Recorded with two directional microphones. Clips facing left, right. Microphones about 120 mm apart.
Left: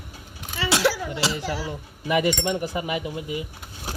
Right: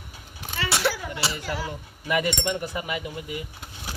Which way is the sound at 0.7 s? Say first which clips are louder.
Left 4 dB; 90° left.